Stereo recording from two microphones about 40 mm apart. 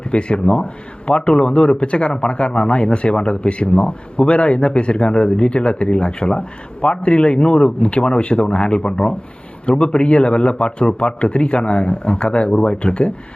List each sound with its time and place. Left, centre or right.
0.0 s a man's voice: left